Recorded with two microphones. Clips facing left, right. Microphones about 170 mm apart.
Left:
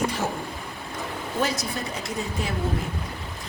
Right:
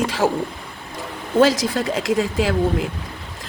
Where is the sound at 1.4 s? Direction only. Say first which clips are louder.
Right 11 dB; 90° right.